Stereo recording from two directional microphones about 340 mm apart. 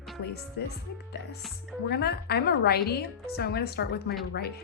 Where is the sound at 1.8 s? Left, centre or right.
Left.